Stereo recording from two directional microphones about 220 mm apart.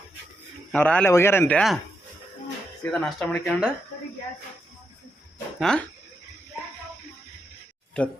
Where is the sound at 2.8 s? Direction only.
5° left (ahead or behind).